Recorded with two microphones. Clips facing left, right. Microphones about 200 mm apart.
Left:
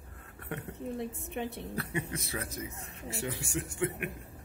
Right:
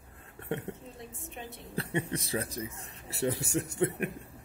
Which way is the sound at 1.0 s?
60° left (ahead or behind).